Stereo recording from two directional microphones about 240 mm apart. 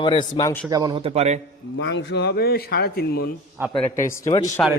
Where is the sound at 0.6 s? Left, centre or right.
Centre.